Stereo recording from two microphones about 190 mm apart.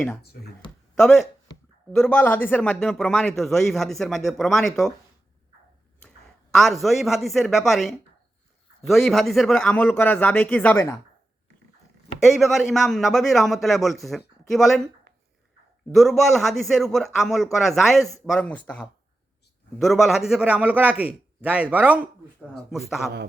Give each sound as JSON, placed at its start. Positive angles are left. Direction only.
{"t": 0.9, "sound": "a man's voice", "side_deg": 0}
{"t": 6.0, "sound": "a man's voice", "side_deg": 5}
{"t": 12.2, "sound": "a man's voice", "side_deg": 0}
{"t": 15.1, "sound": "a sound", "side_deg": -60}
{"t": 15.9, "sound": "a man's voice", "side_deg": 0}